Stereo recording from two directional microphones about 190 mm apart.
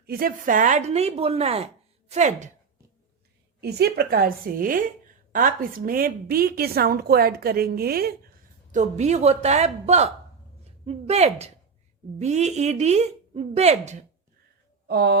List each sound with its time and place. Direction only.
0.0 s a woman's voice: 50° right (ahead or behind)
3.6 s a woman's voice: 55° right (ahead or behind)
8.7 s a woman's voice: 40° right (ahead or behind)
14.8 s speech: 60° right (ahead or behind)